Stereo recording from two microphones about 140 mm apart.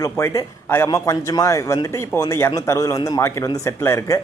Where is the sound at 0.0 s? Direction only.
20° left (ahead or behind).